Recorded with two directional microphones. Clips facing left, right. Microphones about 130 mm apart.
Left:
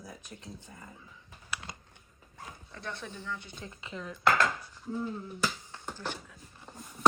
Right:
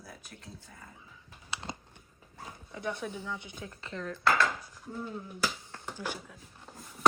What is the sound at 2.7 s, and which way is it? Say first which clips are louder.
Speech: right 6 dB; 10° right (ahead or behind).